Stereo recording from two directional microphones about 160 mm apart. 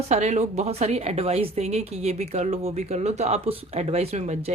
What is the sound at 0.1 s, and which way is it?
A woman's voice, 45° right (ahead or behind).